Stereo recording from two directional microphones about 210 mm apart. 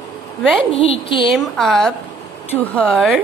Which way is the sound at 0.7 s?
25° left (ahead or behind).